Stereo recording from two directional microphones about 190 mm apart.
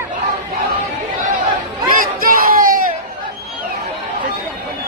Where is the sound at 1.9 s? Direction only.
45° right (ahead or behind).